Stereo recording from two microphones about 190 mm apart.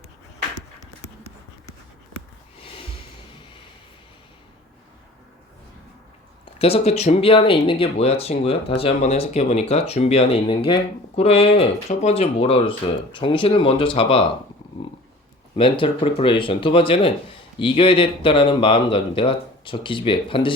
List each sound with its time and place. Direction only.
6.4 s speech: 30° left (ahead or behind)
15.5 s speech: 25° left (ahead or behind)